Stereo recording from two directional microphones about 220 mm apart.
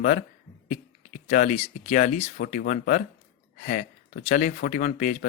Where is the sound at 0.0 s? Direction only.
40° left (ahead or behind).